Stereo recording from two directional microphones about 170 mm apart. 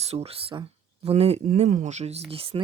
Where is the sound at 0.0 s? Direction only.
35° right (ahead or behind).